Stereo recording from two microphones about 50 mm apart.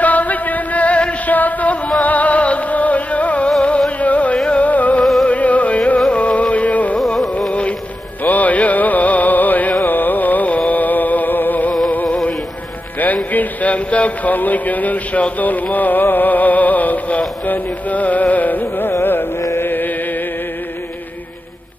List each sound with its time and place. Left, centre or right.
0.0 s a sound: left
2.0 s music: left
8.2 s music: left
13.0 s speech: left
15.3 s music: left
19.6 s chant: left